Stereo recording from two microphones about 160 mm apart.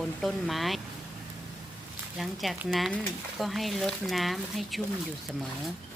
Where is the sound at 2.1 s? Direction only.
Centre (ahead or behind).